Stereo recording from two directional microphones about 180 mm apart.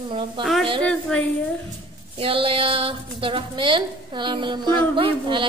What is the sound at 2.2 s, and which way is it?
A woman's voice, 30° right (ahead or behind).